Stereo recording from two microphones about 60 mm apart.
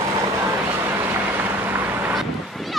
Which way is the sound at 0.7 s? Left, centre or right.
Right.